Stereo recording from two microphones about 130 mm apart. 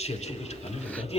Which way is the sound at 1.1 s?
50° left (ahead or behind).